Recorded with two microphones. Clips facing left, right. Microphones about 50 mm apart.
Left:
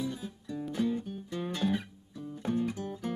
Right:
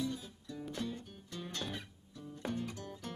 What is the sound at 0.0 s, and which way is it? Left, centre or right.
Music, centre.